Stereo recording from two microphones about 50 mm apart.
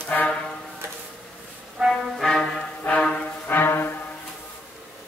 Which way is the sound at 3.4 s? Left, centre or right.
Left.